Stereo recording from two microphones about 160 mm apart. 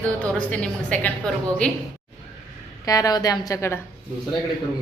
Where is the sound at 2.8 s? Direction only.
20° left (ahead or behind).